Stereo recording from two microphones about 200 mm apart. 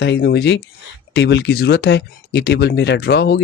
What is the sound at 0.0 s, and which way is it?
Speech, 55° left (ahead or behind).